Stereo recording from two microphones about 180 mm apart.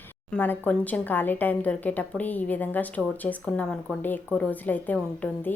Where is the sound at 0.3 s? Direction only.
10° left (ahead or behind).